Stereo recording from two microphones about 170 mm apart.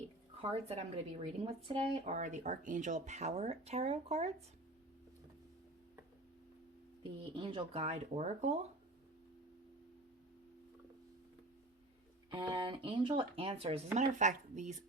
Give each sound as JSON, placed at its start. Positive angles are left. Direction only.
{"t": 0.4, "sound": "speech", "side_deg": -40}
{"t": 7.2, "sound": "speech", "side_deg": -30}
{"t": 12.3, "sound": "speech", "side_deg": -30}